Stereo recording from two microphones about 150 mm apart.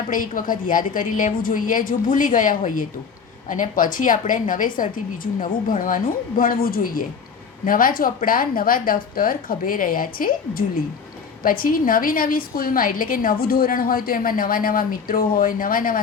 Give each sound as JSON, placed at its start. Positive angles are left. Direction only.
{"t": 0.1, "sound": "a woman's voice", "side_deg": 65}